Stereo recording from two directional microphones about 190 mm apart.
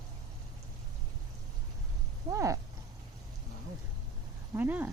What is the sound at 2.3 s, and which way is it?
Speech, 15° right (ahead or behind).